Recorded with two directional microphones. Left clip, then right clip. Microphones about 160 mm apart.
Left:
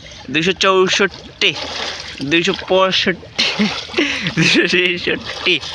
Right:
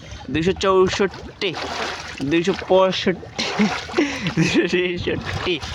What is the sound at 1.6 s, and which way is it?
Speech, 15° right (ahead or behind).